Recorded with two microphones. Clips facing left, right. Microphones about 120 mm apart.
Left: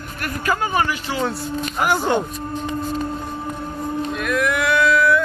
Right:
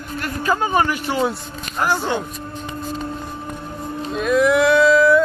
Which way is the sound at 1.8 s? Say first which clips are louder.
Even; 15° left (ahead or behind).